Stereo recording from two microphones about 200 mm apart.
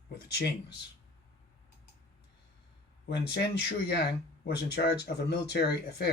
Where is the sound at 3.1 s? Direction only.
55° left (ahead or behind).